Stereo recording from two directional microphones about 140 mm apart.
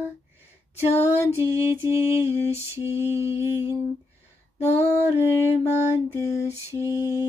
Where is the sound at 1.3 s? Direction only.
15° right (ahead or behind).